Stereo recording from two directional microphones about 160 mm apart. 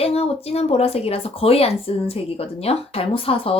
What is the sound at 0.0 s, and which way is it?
Speech, 40° left (ahead or behind).